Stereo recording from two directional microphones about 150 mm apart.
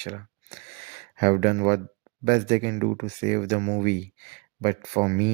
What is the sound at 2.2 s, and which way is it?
Speech, 45° right (ahead or behind).